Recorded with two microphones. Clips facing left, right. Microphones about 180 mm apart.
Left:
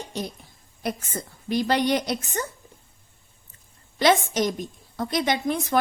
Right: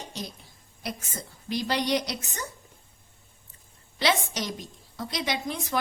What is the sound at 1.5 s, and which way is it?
Speech, 55° left (ahead or behind).